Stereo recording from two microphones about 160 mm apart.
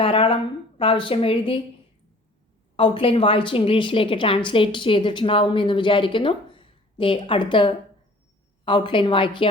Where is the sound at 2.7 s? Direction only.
35° left (ahead or behind).